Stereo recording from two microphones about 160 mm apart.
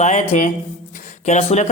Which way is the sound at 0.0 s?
50° left (ahead or behind).